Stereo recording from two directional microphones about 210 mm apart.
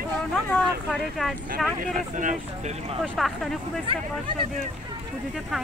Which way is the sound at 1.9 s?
40° right (ahead or behind).